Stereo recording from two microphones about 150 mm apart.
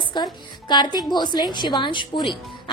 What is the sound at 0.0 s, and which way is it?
A woman's voice, 30° left (ahead or behind).